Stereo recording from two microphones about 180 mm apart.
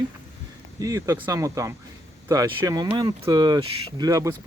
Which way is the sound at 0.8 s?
20° right (ahead or behind).